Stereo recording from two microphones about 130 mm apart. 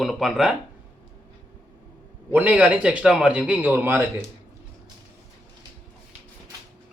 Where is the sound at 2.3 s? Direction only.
15° right (ahead or behind).